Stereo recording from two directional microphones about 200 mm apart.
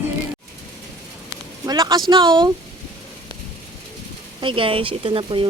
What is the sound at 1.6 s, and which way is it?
Speech, 20° right (ahead or behind).